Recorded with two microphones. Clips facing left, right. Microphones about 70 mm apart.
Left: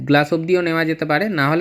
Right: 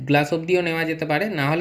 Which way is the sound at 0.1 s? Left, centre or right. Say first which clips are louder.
Left 4 dB; left.